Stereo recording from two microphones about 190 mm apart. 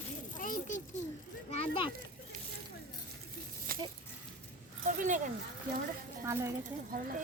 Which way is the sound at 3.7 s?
50° right (ahead or behind).